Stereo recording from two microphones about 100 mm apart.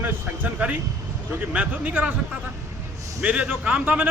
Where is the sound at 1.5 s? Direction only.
15° right (ahead or behind).